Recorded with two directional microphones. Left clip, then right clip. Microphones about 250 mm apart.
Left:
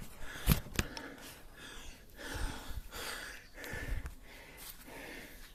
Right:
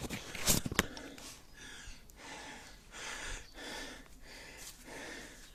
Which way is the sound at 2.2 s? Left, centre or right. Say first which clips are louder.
Left 4 dB; centre.